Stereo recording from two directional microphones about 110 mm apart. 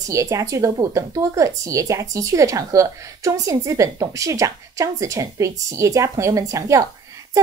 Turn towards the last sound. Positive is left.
turn(degrees=-30)  # may be behind; listen again after turning